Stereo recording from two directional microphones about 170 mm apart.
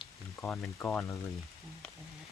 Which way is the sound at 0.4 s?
10° left (ahead or behind).